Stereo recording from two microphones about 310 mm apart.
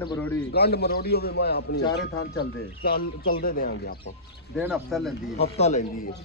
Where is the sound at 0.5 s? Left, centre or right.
Left.